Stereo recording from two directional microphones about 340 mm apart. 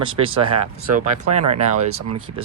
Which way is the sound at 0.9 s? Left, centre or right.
Right.